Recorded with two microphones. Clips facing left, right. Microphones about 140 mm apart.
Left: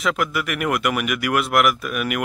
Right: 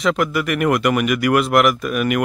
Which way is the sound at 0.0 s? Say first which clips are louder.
Right 4 dB; centre (ahead or behind).